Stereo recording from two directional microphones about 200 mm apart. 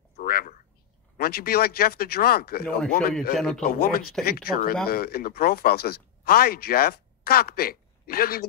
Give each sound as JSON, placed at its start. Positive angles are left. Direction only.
{"t": 0.2, "sound": "a sound", "side_deg": 45}
{"t": 1.1, "sound": "speech", "side_deg": 50}
{"t": 3.3, "sound": "speech", "side_deg": 5}
{"t": 3.7, "sound": "speech", "side_deg": 45}